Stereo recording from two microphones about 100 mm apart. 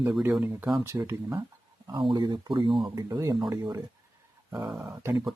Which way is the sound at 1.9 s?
45° right (ahead or behind).